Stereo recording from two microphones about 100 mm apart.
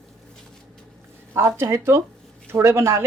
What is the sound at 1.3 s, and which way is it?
Speech, 25° right (ahead or behind).